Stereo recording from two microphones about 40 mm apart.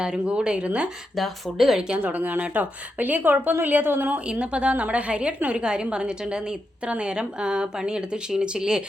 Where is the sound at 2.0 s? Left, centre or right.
Right.